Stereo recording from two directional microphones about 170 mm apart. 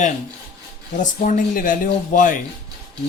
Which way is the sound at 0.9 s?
45° left (ahead or behind).